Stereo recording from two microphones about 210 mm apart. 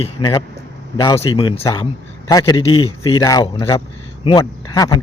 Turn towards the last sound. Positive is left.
turn(degrees=15)  # may be behind; listen again after turning